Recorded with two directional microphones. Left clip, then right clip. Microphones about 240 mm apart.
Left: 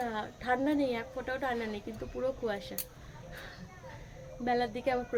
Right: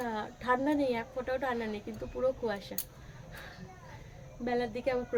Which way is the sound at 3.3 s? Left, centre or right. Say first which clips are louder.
Left 1 dB; centre.